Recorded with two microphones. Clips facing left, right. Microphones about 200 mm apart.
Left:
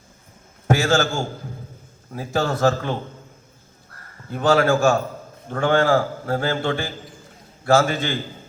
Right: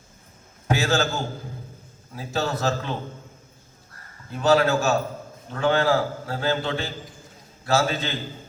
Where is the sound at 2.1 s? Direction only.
50° left (ahead or behind).